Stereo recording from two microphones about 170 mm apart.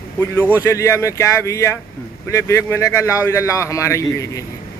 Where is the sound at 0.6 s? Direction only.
15° left (ahead or behind).